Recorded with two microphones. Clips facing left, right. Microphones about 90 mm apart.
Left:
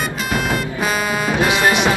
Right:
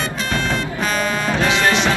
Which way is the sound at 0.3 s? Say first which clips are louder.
Left 2 dB; 5° left (ahead or behind).